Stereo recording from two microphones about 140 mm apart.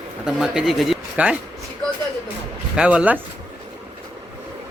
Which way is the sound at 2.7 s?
10° right (ahead or behind).